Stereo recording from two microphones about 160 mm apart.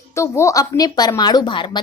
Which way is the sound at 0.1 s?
15° left (ahead or behind).